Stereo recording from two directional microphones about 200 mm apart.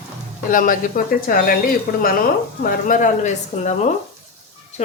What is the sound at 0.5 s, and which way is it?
Speech, 40° left (ahead or behind).